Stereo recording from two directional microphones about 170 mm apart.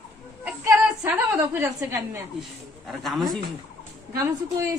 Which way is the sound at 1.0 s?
15° right (ahead or behind).